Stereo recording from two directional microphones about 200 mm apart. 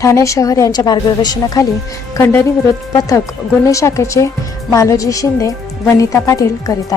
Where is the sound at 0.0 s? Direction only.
15° left (ahead or behind).